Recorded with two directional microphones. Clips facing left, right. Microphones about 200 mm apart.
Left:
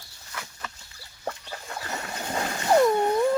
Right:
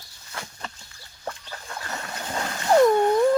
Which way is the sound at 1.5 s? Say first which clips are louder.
Left 1 dB; 20° left (ahead or behind).